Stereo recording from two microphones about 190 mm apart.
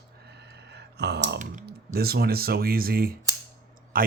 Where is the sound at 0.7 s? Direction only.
60° right (ahead or behind).